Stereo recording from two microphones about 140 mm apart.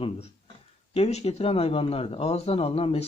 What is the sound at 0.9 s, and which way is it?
Speech, 50° left (ahead or behind).